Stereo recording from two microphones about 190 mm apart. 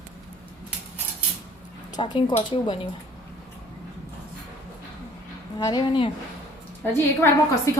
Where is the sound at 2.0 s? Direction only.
25° left (ahead or behind).